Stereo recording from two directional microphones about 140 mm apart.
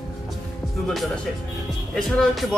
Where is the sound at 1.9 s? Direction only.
5° left (ahead or behind).